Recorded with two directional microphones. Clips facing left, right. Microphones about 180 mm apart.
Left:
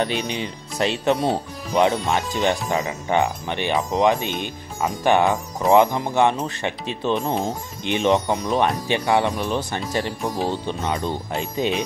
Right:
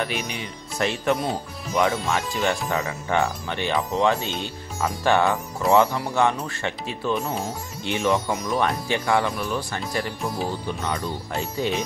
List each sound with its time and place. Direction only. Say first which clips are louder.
0.0 s speech: left 4 dB; 25° left (ahead or behind)